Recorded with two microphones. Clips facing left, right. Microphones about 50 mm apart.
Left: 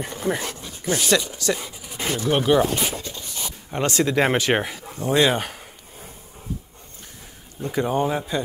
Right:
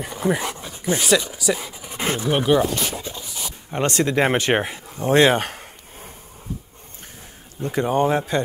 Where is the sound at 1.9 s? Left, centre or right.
Right.